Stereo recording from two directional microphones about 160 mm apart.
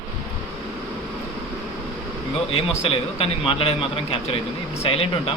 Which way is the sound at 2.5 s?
35° left (ahead or behind).